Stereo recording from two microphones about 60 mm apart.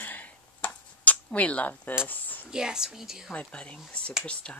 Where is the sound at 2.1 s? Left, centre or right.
Left.